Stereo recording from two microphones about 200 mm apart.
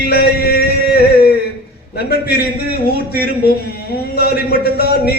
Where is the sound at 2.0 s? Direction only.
50° left (ahead or behind).